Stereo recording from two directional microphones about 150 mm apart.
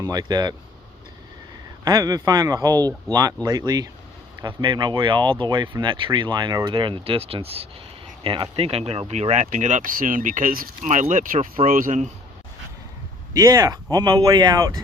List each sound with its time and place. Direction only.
0.0 s speech: 25° right (ahead or behind)
1.8 s speech: 25° right (ahead or behind); by 12.1 s 55° right (ahead or behind)
13.3 s speech: 25° right (ahead or behind)